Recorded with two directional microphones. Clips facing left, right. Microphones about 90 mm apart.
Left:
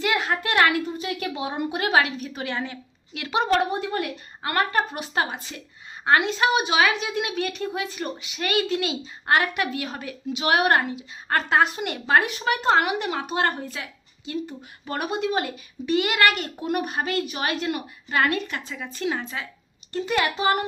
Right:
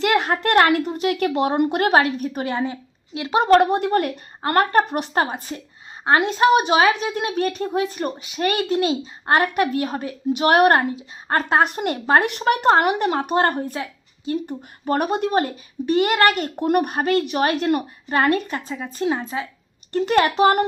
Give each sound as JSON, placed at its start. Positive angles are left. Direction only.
{"t": 0.0, "sound": "a sound", "side_deg": -55}
{"t": 0.8, "sound": "a woman's voice", "side_deg": -70}
{"t": 1.9, "sound": "a woman's voice", "side_deg": -40}
{"t": 3.3, "sound": "a woman's voice", "side_deg": -50}
{"t": 3.7, "sound": "a woman's voice", "side_deg": -60}
{"t": 4.9, "sound": "a woman's voice", "side_deg": -60}
{"t": 5.1, "sound": "a woman's voice", "side_deg": -40}
{"t": 10.3, "sound": "a woman's voice", "side_deg": -50}
{"t": 11.6, "sound": "a woman's voice", "side_deg": -50}
{"t": 12.2, "sound": "a woman's voice", "side_deg": -60}
{"t": 12.6, "sound": "a woman's voice", "side_deg": -45}
{"t": 14.4, "sound": "a woman's voice", "side_deg": -45}
{"t": 16.6, "sound": "a woman's voice", "side_deg": -55}
{"t": 19.9, "sound": "a woman's voice", "side_deg": -60}